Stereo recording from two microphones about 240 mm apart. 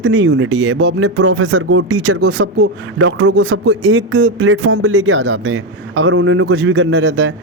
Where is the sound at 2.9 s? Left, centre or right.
Right.